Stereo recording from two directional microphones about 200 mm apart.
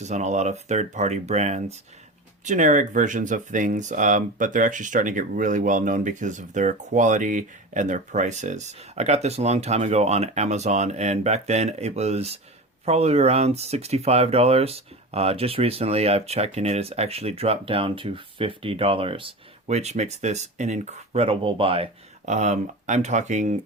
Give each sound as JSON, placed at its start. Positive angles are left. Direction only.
{"t": 0.0, "sound": "speech", "side_deg": -35}